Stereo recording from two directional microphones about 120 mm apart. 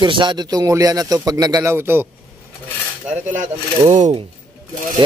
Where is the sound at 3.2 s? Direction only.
85° right; by 4.2 s 70° right (ahead or behind).